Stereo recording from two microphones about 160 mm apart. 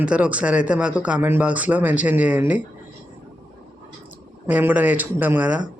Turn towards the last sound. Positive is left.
turn(degrees=-10)  # may be behind; listen again after turning